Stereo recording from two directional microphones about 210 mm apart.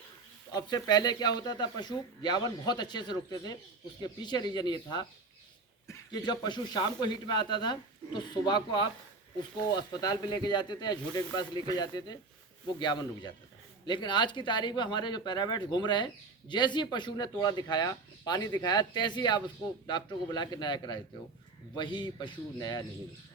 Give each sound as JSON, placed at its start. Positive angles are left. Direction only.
{"t": 0.5, "sound": "speech", "side_deg": 20}